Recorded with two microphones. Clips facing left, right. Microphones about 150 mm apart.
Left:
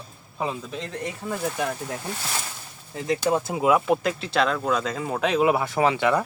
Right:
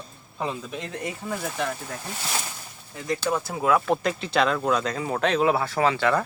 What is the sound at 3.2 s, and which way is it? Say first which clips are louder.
Speech: left 4 dB; 20° left (ahead or behind).